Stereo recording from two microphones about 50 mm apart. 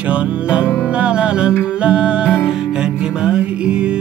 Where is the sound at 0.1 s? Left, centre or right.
Right.